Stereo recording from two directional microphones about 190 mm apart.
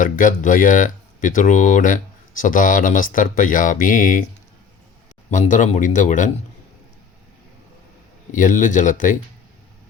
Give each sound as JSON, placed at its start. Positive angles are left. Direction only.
{"t": 0.0, "sound": "speech", "side_deg": 45}
{"t": 5.3, "sound": "speech", "side_deg": 40}
{"t": 8.3, "sound": "speech", "side_deg": 40}